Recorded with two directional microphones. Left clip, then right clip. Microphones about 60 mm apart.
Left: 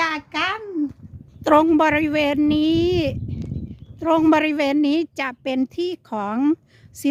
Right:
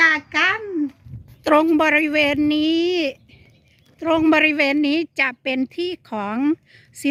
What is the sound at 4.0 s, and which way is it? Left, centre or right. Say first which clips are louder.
A woman's voice: right 1 dB; centre.